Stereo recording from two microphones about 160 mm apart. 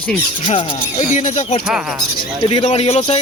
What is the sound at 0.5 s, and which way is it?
Speech, 50° left (ahead or behind).